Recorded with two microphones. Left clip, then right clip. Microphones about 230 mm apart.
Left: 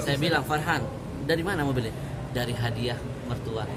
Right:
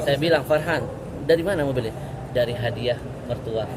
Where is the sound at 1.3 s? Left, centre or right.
Left.